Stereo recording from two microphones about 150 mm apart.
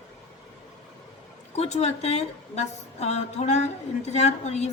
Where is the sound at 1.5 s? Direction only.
45° left (ahead or behind).